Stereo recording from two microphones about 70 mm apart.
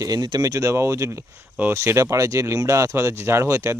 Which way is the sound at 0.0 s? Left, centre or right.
Right.